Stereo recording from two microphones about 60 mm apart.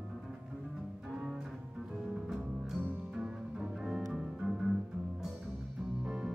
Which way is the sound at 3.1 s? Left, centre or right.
Centre.